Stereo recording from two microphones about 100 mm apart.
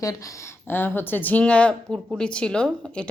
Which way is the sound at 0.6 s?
20° left (ahead or behind).